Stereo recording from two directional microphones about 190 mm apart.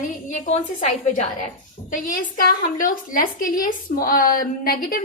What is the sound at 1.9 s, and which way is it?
A woman's voice, 45° left (ahead or behind).